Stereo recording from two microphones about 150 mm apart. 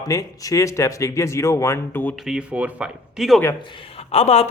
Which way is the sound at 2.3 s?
10° right (ahead or behind).